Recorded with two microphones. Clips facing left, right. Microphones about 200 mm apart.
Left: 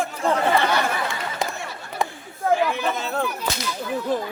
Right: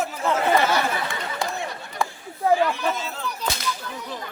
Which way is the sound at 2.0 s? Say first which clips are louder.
Left 1 dB; 20° left (ahead or behind).